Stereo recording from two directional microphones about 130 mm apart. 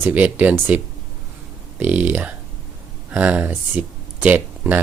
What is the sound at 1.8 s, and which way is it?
Speech, 10° right (ahead or behind).